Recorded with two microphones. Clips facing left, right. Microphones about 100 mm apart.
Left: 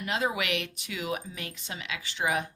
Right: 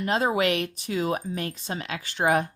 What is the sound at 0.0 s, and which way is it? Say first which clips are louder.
Speech: right 7 dB; 40° right (ahead or behind).